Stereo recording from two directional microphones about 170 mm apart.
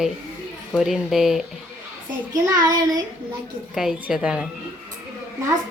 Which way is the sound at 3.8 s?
Centre (ahead or behind).